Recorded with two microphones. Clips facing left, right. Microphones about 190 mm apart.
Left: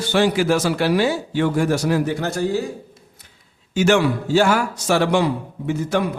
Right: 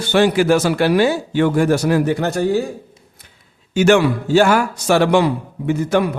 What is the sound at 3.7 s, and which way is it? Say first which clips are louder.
A man's voice: right 3 dB; 60° right (ahead or behind).